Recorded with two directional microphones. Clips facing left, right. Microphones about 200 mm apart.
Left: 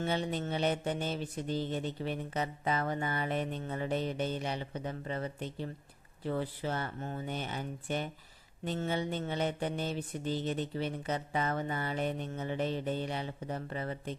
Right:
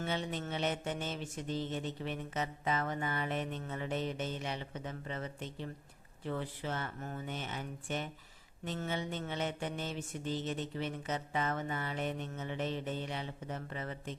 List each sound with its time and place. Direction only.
0.0 s mantra: 35° left (ahead or behind)